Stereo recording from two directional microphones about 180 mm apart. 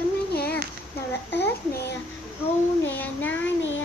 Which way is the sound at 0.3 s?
60° left (ahead or behind).